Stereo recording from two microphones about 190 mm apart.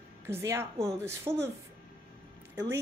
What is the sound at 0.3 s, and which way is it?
A woman's voice, 15° right (ahead or behind).